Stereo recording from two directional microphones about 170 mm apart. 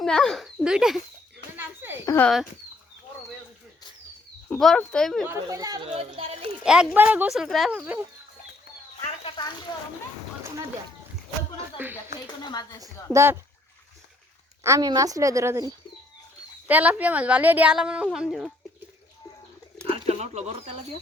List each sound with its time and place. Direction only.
0.0 s speech: 5° left (ahead or behind)
1.5 s a sound: 10° right (ahead or behind)
2.0 s speech: 10° left (ahead or behind)
4.4 s speech: 5° left (ahead or behind)
5.2 s a woman's voice: 20° right (ahead or behind)
5.9 s speech: 35° right (ahead or behind)
6.7 s speech: 5° right (ahead or behind)
7.8 s a woman's voice: 10° right (ahead or behind)
9.2 s a sound: 30° left (ahead or behind)
11.8 s a woman's voice: 10° right (ahead or behind)
12.4 s speech: 25° left (ahead or behind)
12.8 s a woman's voice: 15° right (ahead or behind)
14.6 s a woman's voice: 20° right (ahead or behind); by 18.5 s 5° right (ahead or behind)
19.8 s speech: 35° right (ahead or behind)